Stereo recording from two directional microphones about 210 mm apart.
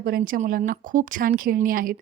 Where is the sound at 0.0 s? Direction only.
45° right (ahead or behind).